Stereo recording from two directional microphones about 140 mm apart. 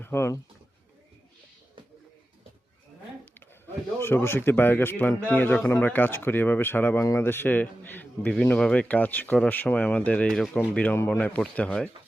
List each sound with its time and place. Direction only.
0.0 s speech: 20° left (ahead or behind)
4.0 s speech: 15° left (ahead or behind)